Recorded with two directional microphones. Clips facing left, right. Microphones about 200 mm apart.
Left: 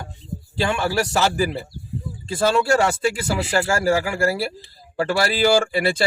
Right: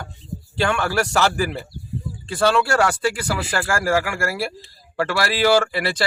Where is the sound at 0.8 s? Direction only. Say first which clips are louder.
Left 1 dB; 25° left (ahead or behind).